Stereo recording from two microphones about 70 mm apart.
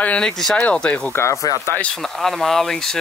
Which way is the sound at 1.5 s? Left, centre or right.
Right.